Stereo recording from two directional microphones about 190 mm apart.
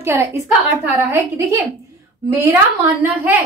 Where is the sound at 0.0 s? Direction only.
10° right (ahead or behind).